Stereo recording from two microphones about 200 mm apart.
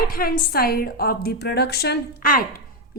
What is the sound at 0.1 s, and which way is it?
Speech, 45° left (ahead or behind).